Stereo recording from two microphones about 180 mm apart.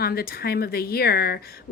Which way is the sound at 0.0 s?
55° left (ahead or behind).